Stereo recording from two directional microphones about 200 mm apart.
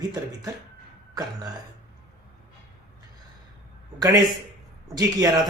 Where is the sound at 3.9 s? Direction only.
15° right (ahead or behind).